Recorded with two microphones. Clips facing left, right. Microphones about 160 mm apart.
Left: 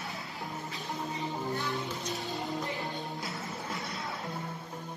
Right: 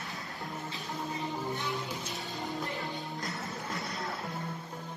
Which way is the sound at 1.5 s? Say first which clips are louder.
Left 1 dB; 20° right (ahead or behind).